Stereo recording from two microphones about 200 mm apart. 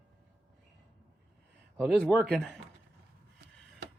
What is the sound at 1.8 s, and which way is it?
Speech, centre (ahead or behind).